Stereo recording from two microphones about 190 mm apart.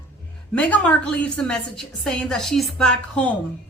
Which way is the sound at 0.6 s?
5° left (ahead or behind).